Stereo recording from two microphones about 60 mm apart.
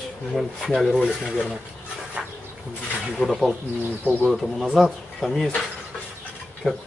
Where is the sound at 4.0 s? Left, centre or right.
Right.